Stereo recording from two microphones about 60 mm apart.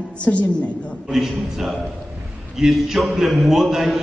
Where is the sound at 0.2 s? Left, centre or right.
Left.